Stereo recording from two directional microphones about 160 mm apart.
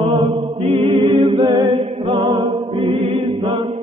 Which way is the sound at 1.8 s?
40° right (ahead or behind).